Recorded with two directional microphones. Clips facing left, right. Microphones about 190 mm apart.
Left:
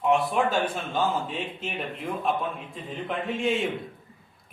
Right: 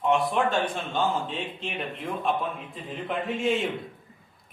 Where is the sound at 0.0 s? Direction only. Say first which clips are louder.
Left 1 dB; centre (ahead or behind).